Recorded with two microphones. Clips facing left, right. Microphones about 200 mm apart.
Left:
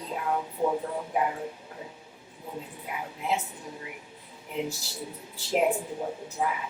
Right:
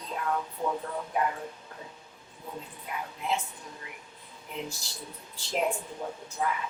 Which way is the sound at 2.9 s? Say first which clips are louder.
Left 1 dB; 10° left (ahead or behind).